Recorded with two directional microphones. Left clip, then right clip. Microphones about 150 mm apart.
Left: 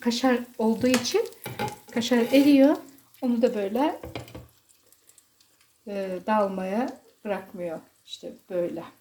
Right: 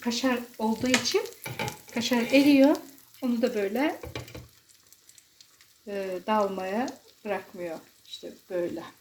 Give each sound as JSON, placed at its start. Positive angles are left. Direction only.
{"t": 0.0, "sound": "speech", "side_deg": 20}
{"t": 2.7, "sound": "speech", "side_deg": 0}
{"t": 5.8, "sound": "speech", "side_deg": 10}